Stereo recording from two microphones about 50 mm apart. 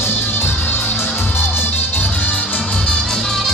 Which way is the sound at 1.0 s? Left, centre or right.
Left.